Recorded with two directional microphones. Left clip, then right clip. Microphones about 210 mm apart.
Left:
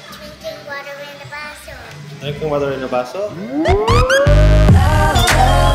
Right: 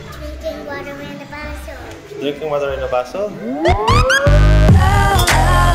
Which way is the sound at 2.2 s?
10° right (ahead or behind).